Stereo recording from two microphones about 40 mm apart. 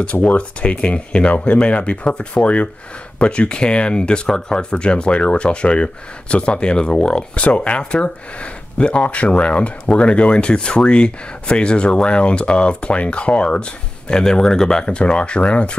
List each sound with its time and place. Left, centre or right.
0.0 s speech: left
7.3 s speech: left